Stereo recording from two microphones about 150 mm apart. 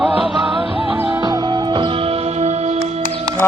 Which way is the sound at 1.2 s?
25° right (ahead or behind).